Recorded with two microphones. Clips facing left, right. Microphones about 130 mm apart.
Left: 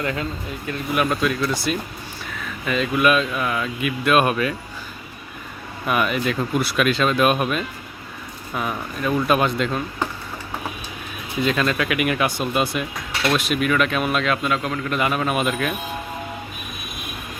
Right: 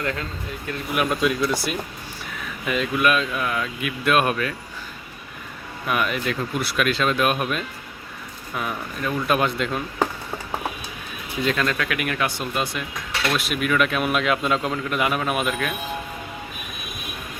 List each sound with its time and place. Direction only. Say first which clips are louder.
0.0 s speech: left 2 dB; 10° left (ahead or behind)
1.2 s speech: even; 10° right (ahead or behind); by 4.5 s 10° left (ahead or behind)
5.9 s speech: left 3 dB; 5° left (ahead or behind)
11.4 s speech: left 2 dB; 10° left (ahead or behind)
13.3 s speech: left 2 dB; centre (ahead or behind)
14.4 s a man's voice: even; 20° right (ahead or behind)
14.8 s speech: left 3 dB; 5° right (ahead or behind)